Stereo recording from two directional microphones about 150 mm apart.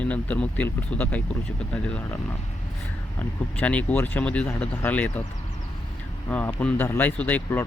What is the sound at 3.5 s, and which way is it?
Speech, 10° left (ahead or behind).